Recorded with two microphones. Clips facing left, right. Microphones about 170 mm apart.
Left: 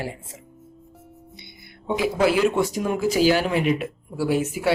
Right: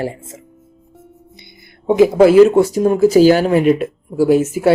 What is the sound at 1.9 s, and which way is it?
Speech, 45° right (ahead or behind).